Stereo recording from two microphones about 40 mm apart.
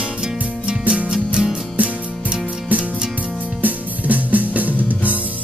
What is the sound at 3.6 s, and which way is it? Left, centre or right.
Music, right.